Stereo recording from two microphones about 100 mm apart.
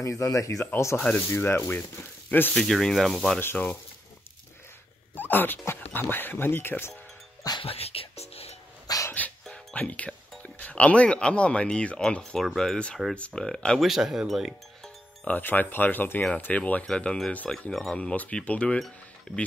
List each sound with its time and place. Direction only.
0.0 s speech: 35° left (ahead or behind)
2.5 s speech: 5° left (ahead or behind)
3.3 s speech: 20° left (ahead or behind)
5.1 s speech: 20° left (ahead or behind)
7.6 s music: 80° left
8.8 s dog: 35° left (ahead or behind)
9.5 s speech: 10° left (ahead or behind)
15.2 s speech: 15° left (ahead or behind)